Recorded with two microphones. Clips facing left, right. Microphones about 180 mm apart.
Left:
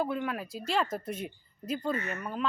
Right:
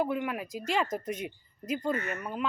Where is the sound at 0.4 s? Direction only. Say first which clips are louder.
Right 2 dB; 45° right (ahead or behind).